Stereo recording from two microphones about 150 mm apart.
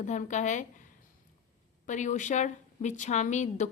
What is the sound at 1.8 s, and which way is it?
A woman's voice, 55° left (ahead or behind).